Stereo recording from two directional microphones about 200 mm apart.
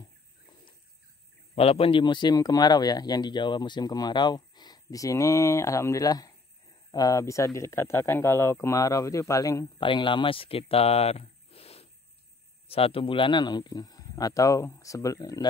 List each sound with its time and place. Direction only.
1.5 s speech: 30° left (ahead or behind)